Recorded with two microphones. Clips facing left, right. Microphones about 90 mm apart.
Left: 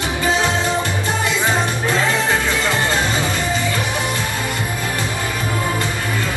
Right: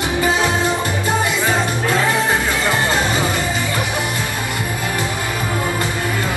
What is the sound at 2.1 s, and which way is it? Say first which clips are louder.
Music: right 1 dB; 20° right (ahead or behind).